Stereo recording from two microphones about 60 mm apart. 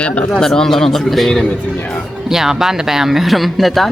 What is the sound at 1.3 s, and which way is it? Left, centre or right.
Speech, centre.